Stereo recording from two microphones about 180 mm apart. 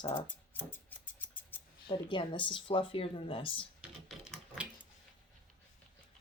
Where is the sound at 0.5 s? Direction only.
10° left (ahead or behind).